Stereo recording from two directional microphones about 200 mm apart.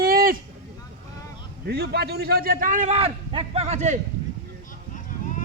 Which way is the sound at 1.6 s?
55° right (ahead or behind).